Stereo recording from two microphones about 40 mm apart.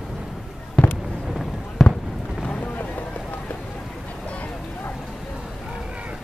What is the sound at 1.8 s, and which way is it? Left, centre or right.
Fireworks, centre.